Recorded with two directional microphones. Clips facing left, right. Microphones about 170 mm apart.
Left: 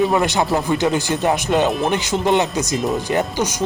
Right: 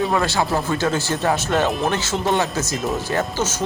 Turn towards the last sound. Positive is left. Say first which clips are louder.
# left 2 dB
turn(degrees=15)  # may be behind; listen again after turning